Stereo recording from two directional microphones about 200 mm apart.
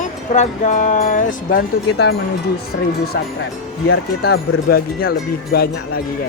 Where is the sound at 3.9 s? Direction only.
50° left (ahead or behind).